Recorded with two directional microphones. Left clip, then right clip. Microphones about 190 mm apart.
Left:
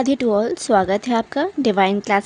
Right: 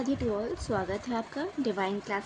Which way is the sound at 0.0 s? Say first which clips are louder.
Left 13 dB; 55° left (ahead or behind).